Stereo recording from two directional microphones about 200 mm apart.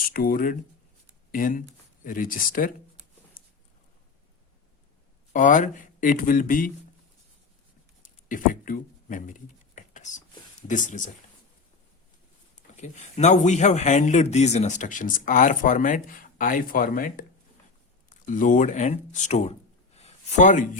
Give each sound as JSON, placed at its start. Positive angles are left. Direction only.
{"t": 0.1, "sound": "speech", "side_deg": 45}
{"t": 5.3, "sound": "speech", "side_deg": 40}
{"t": 8.0, "sound": "speech", "side_deg": 40}
{"t": 9.7, "sound": "a sound", "side_deg": 35}
{"t": 10.7, "sound": "speech", "side_deg": 40}
{"t": 12.7, "sound": "speech", "side_deg": 35}